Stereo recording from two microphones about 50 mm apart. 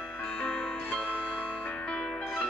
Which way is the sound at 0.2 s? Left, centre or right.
Centre.